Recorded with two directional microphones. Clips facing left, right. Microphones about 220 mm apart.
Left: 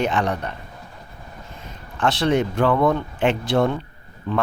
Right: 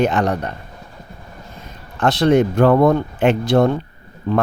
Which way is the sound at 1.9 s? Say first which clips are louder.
Right 5 dB; 40° right (ahead or behind).